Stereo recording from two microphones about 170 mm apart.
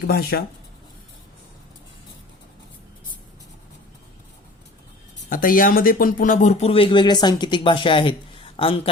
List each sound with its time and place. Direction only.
0.1 s speech: 65° left (ahead or behind)
5.3 s speech: 55° left (ahead or behind); by 8.9 s 30° left (ahead or behind)